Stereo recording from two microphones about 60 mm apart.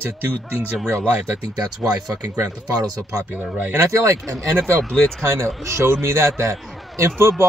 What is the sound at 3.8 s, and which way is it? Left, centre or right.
Speech, right.